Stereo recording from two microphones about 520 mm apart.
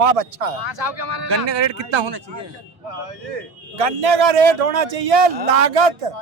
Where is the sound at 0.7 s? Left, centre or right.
Right.